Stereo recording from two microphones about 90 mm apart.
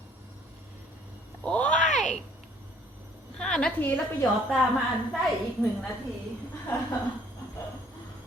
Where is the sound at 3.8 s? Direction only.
15° left (ahead or behind).